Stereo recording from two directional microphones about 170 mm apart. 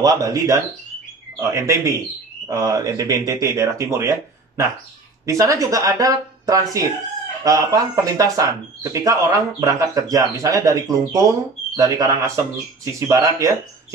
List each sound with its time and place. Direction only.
0.0 s speech: 20° right (ahead or behind)